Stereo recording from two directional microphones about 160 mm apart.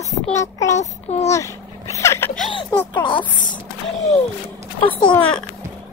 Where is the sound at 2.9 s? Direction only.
30° left (ahead or behind).